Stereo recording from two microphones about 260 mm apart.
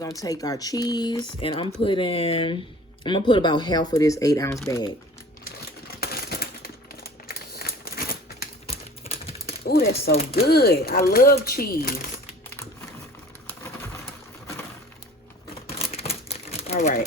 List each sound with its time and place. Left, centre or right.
0.2 s speech: centre
5.5 s crumpling: left
8.6 s a sound: left
9.6 s speech: left
12.5 s typing: centre
15.9 s crumpling: left